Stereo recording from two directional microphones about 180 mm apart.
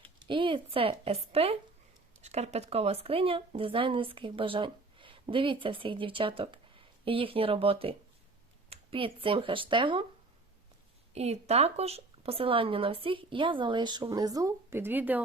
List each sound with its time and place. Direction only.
0.0 s speech: 30° right (ahead or behind)
11.1 s speech: 35° right (ahead or behind); by 15.2 s 10° right (ahead or behind)